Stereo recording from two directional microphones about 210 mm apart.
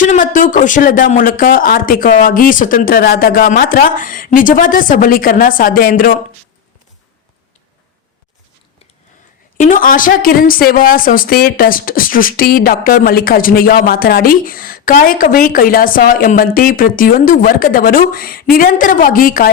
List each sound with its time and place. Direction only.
0.0 s speech: 40° left (ahead or behind)
9.6 s a woman's voice: 40° left (ahead or behind)